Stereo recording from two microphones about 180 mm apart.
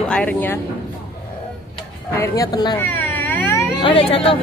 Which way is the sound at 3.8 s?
30° left (ahead or behind).